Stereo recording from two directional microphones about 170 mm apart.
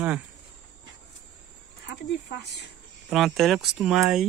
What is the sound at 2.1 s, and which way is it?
Speech, 80° left.